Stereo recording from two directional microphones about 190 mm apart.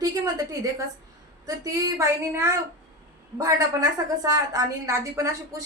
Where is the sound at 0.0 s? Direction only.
20° right (ahead or behind).